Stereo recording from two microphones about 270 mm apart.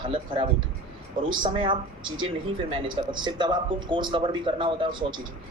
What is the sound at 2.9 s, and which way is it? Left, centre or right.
A man's voice, centre.